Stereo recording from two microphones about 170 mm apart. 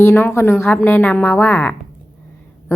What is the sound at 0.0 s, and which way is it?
A woman's voice, 15° left (ahead or behind).